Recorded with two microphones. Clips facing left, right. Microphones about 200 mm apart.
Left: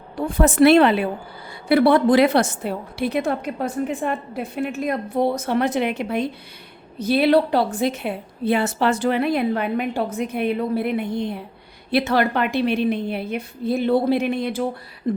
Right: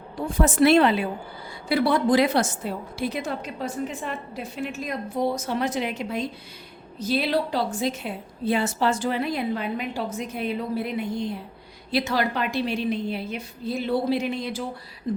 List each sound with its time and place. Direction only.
0.2 s a woman's voice: 65° left (ahead or behind)